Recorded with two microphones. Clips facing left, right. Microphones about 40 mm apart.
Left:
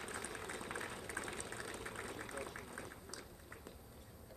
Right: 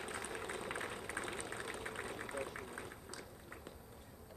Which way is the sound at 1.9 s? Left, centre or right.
Right.